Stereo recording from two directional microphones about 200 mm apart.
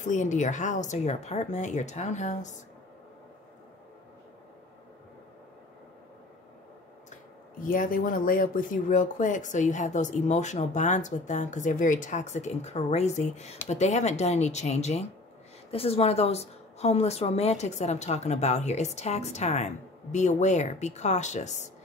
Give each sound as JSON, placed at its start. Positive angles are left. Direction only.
{"t": 0.0, "sound": "speech", "side_deg": 40}
{"t": 7.6, "sound": "speech", "side_deg": 45}